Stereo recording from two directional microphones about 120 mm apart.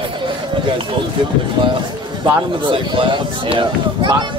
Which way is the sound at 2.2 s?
40° right (ahead or behind).